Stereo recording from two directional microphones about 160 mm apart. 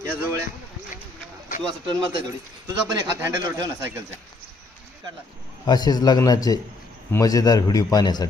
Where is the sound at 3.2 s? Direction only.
20° right (ahead or behind).